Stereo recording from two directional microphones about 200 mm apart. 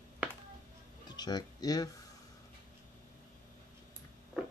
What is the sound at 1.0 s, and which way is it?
Speech, 20° left (ahead or behind).